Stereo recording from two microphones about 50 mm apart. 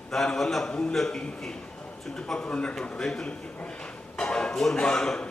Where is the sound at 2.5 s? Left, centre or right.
Left.